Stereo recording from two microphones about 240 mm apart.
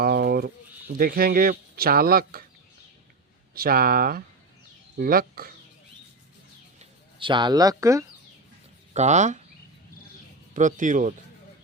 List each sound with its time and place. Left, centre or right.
0.0 s speech: right
3.5 s speech: right
6.7 s speech: right
8.9 s speech: right
10.5 s speech: right